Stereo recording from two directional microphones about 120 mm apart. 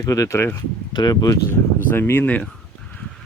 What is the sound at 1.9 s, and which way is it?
Speech, 20° left (ahead or behind).